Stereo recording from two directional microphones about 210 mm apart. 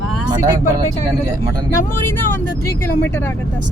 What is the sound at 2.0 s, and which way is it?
Speech, 10° left (ahead or behind).